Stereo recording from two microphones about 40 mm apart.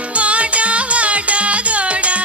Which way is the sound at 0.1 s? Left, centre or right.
Right.